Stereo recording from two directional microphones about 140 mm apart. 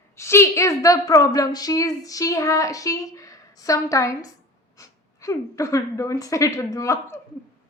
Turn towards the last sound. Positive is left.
turn(degrees=20)  # may be behind; listen again after turning